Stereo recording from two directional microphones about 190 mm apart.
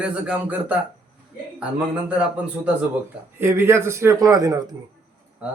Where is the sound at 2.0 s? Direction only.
5° right (ahead or behind).